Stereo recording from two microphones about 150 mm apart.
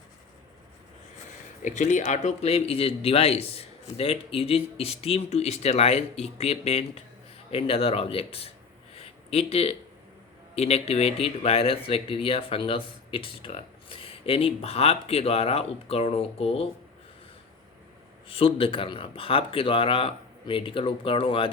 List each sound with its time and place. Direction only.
1.6 s speech: 55° left (ahead or behind)
9.0 s a sound: 40° left (ahead or behind)
10.5 s speech: 45° left (ahead or behind)
18.3 s speech: 40° left (ahead or behind)